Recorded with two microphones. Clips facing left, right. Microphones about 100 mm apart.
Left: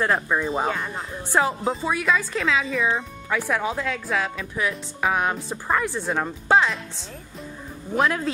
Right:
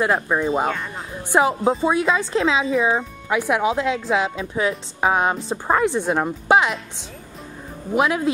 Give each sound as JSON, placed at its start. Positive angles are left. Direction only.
{"t": 0.0, "sound": "speech", "side_deg": -10}
{"t": 1.3, "sound": "speech", "side_deg": -15}
{"t": 1.9, "sound": "speech", "side_deg": -25}
{"t": 3.3, "sound": "speech", "side_deg": -15}
{"t": 7.9, "sound": "speech", "side_deg": -10}